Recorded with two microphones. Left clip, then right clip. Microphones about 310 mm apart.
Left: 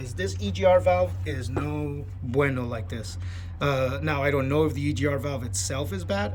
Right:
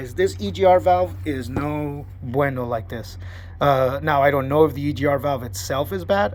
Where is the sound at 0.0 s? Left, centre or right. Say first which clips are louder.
Right 10 dB; centre.